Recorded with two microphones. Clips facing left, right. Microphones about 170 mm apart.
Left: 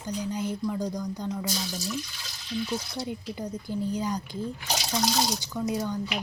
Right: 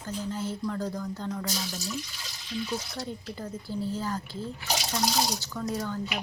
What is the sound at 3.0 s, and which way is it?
A woman's voice, 15° left (ahead or behind).